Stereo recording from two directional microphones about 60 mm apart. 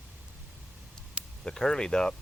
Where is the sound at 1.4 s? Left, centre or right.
Centre.